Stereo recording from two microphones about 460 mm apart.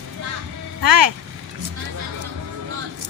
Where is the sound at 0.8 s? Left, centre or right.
Right.